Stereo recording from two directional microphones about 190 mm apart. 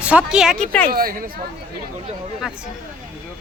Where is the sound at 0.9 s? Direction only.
50° right (ahead or behind).